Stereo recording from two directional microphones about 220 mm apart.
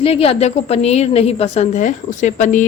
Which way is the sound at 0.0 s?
25° left (ahead or behind).